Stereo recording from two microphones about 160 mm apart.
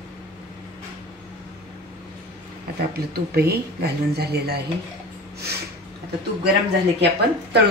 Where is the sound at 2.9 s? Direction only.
80° right.